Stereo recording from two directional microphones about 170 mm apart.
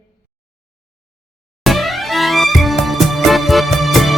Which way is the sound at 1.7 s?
Centre (ahead or behind).